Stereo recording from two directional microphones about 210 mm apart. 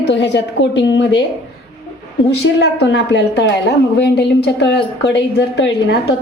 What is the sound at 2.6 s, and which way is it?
A woman's voice, 55° left (ahead or behind).